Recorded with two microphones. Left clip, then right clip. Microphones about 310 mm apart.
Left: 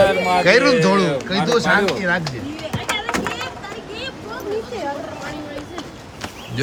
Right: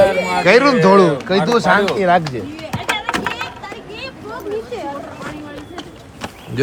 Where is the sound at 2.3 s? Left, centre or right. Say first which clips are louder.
Right 2 dB; right.